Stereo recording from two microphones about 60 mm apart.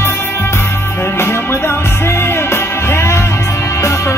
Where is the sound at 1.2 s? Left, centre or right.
Left.